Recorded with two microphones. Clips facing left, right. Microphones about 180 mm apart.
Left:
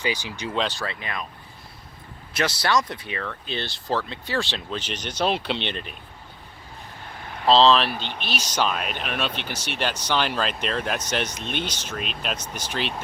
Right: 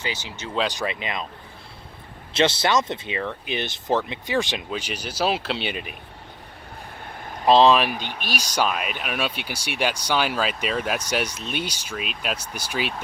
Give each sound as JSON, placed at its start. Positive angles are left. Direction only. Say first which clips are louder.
{"t": 0.0, "sound": "speech", "louder": "left 4 dB", "side_deg": 15}
{"t": 0.7, "sound": "speech", "louder": "right 4 dB", "side_deg": -15}
{"t": 2.3, "sound": "speech", "louder": "right 3 dB", "side_deg": -25}
{"t": 7.4, "sound": "speech", "louder": "right 1 dB", "side_deg": -15}